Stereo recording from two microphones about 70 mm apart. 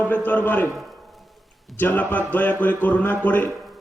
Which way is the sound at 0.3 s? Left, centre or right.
Left.